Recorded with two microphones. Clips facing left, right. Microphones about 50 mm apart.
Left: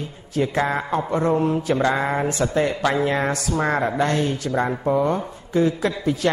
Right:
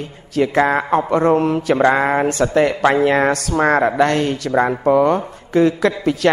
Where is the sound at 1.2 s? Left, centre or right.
Right.